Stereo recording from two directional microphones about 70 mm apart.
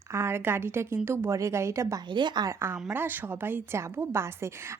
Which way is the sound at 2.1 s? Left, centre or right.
Right.